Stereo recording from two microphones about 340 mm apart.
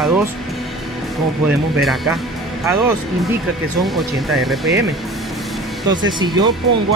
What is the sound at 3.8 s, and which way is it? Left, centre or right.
Speech, centre.